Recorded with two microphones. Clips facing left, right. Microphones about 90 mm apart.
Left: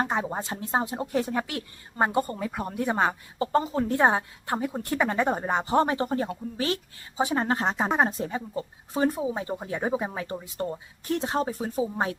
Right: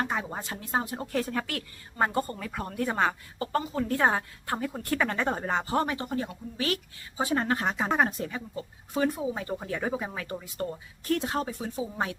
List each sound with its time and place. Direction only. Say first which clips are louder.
0.0 s speech: left 4 dB; 25° left (ahead or behind)
7.2 s speech: left 2 dB; 20° left (ahead or behind)